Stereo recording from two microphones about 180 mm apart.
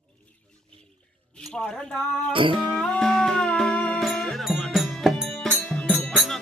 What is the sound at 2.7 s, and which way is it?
Music, centre (ahead or behind).